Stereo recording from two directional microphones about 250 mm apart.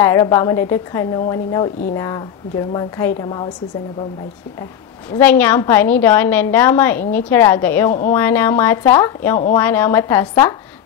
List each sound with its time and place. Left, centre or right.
0.0 s a woman's voice: centre
5.1 s a woman's voice: centre